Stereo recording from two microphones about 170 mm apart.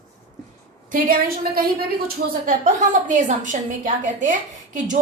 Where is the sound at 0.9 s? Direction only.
55° right (ahead or behind).